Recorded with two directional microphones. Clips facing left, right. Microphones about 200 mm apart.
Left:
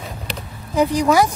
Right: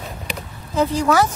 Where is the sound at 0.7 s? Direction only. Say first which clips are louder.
Left 2 dB; 15° left (ahead or behind).